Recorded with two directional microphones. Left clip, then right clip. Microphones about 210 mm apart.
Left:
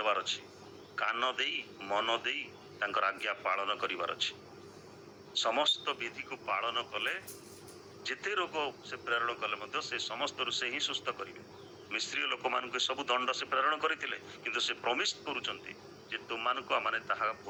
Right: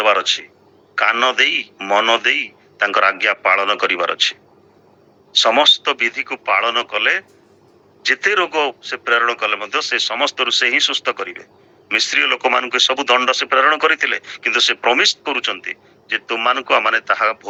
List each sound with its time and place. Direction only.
0.0 s speech: 40° right (ahead or behind)